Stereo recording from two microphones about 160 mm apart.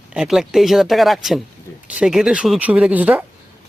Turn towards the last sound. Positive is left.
turn(degrees=-10)  # may be behind; listen again after turning